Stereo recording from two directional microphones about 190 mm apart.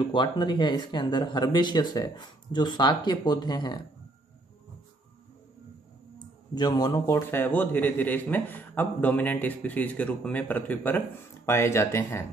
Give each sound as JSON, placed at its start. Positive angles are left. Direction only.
{"t": 0.1, "sound": "speech", "side_deg": 25}
{"t": 6.1, "sound": "speech", "side_deg": 20}